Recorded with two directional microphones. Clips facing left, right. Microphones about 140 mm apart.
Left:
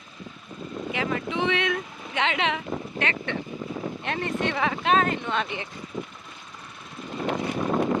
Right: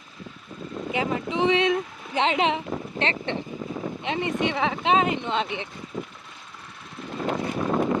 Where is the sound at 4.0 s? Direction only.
15° right (ahead or behind).